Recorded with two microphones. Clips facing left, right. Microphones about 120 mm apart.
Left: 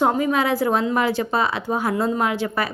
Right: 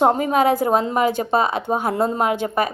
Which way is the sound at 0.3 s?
50° right (ahead or behind).